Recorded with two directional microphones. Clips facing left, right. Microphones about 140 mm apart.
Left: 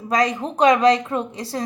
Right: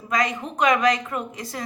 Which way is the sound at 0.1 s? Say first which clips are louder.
Left 4 dB; 30° left (ahead or behind).